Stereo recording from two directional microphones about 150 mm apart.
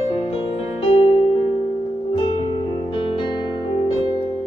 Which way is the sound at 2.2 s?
40° left (ahead or behind).